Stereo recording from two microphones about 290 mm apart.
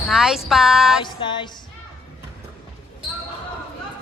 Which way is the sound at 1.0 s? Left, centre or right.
Centre.